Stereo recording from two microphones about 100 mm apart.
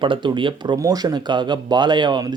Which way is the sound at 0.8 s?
40° right (ahead or behind).